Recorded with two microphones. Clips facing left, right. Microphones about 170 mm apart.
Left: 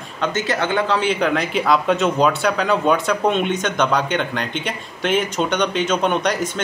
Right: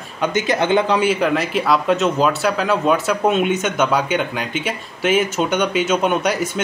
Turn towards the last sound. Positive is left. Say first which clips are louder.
# right 1 dB
turn(degrees=-10)  # may be behind; listen again after turning